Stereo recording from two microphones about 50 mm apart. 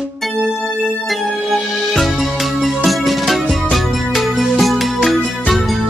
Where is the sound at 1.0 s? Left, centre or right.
Centre.